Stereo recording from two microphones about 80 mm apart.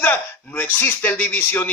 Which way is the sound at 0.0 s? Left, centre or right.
Left.